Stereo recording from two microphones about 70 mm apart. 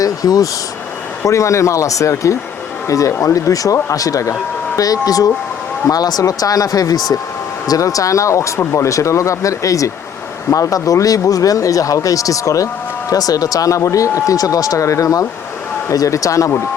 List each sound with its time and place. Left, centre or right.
0.0 s speech: left
1.2 s speech: left